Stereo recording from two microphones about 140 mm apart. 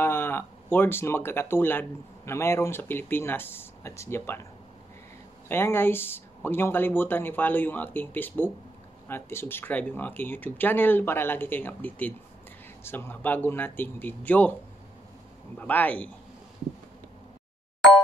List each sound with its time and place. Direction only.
0.0 s speech: 15° left (ahead or behind)
5.5 s speech: 15° left (ahead or behind)
15.5 s speech: 10° left (ahead or behind)